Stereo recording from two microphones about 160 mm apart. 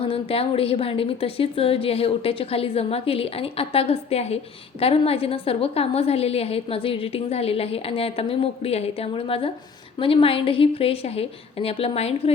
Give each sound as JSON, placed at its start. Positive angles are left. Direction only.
{"t": 0.0, "sound": "a woman's voice", "side_deg": 35}